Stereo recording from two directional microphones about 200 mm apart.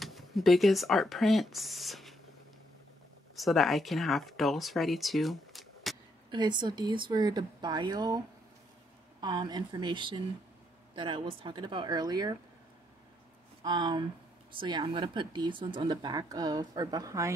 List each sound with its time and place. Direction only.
0.0 s speech: centre (ahead or behind)
3.3 s speech: centre (ahead or behind)
6.3 s speech: 20° right (ahead or behind)
9.2 s speech: 20° right (ahead or behind)
13.6 s speech: 20° right (ahead or behind)